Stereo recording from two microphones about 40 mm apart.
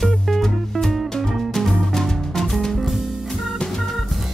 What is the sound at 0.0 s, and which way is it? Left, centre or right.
Music, centre.